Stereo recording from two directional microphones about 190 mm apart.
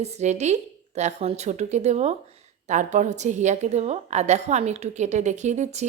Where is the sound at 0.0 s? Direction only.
35° right (ahead or behind).